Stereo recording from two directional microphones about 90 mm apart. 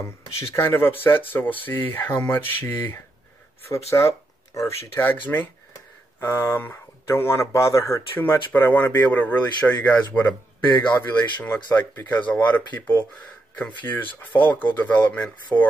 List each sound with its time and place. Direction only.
0.7 s speech: 25° left (ahead or behind)
3.7 s speech: 35° left (ahead or behind)
4.9 s speech: 20° left (ahead or behind)